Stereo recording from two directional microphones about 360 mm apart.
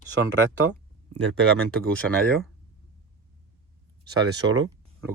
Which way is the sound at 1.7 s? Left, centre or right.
Centre.